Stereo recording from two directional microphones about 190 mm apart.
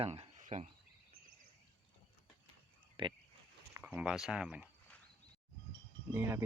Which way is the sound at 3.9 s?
5° right (ahead or behind).